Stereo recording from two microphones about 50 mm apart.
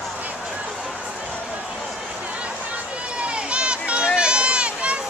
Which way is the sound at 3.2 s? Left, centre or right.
Right.